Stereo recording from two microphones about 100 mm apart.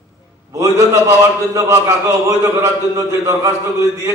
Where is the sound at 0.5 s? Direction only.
30° right (ahead or behind).